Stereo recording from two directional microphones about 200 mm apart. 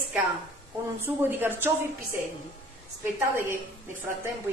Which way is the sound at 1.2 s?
10° right (ahead or behind).